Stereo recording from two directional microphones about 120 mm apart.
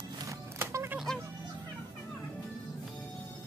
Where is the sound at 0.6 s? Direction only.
20° right (ahead or behind).